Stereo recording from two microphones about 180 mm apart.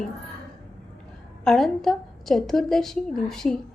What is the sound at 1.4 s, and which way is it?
A woman's voice, centre (ahead or behind).